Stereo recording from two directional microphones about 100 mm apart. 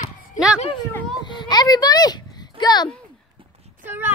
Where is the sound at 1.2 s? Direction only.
45° left (ahead or behind).